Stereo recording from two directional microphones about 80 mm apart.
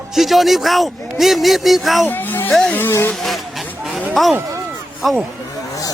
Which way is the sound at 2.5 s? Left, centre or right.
Centre.